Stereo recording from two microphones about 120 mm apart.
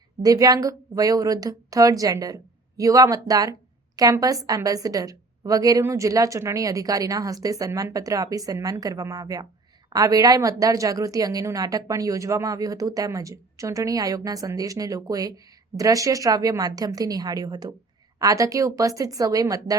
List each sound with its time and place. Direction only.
0.2 s a woman's voice: 30° right (ahead or behind)